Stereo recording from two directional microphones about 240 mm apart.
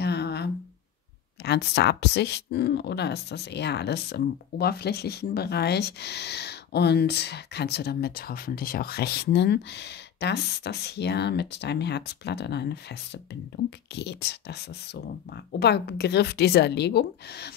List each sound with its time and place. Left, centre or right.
0.0 s a sound: left
1.4 s speech: left
13.9 s speech: left
15.6 s speech: left